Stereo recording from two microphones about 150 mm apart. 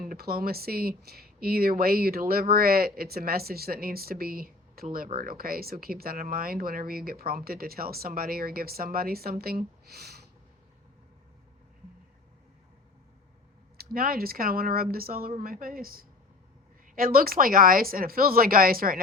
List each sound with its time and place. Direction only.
0.0 s speech: 85° right
13.7 s speech: 80° right